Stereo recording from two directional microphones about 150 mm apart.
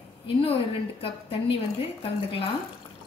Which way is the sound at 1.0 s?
40° left (ahead or behind).